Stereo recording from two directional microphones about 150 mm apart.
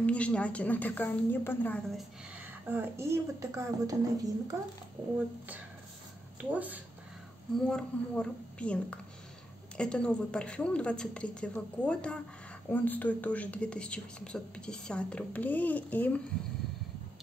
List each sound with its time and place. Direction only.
0.0 s a woman's voice: 10° left (ahead or behind)
1.9 s a woman's voice: centre (ahead or behind)
2.7 s a woman's voice: 15° right (ahead or behind)
6.5 s speech: 10° right (ahead or behind)
7.5 s a woman's voice: 5° left (ahead or behind)